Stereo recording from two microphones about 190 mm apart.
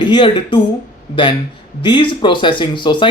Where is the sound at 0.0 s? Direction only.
25° left (ahead or behind).